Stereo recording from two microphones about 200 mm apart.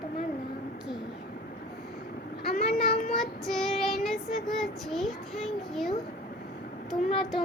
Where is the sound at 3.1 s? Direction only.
Centre (ahead or behind).